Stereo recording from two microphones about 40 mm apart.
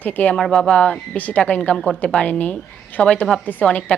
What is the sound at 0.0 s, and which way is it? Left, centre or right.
Speech, left.